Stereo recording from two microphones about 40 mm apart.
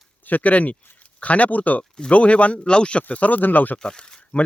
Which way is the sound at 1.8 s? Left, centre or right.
Left.